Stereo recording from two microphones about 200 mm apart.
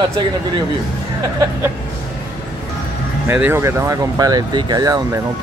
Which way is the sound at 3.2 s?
10° right (ahead or behind).